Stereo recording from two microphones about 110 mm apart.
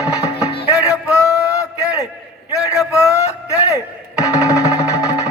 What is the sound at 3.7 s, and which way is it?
Music, 30° left (ahead or behind).